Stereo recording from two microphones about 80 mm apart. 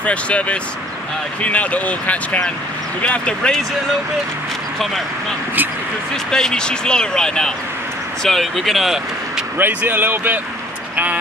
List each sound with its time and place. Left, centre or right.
0.0 s speech: centre
6.3 s speech: centre
9.6 s speech: right